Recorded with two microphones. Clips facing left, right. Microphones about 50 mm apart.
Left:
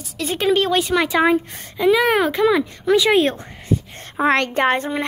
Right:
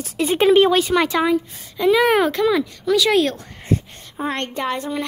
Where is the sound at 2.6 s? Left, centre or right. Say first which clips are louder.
Left 2 dB; left.